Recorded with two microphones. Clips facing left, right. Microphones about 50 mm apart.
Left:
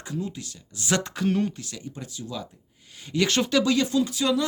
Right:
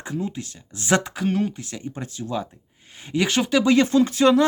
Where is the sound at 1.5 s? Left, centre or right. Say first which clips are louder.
Right 5 dB; right.